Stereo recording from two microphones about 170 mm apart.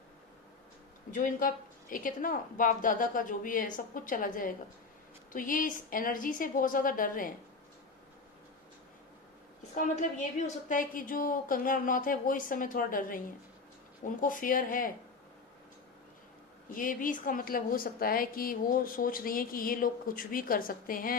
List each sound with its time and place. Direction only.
1.1 s a woman's voice: 55° left (ahead or behind)
9.7 s a woman's voice: 45° left (ahead or behind)
16.6 s a woman's voice: 55° left (ahead or behind)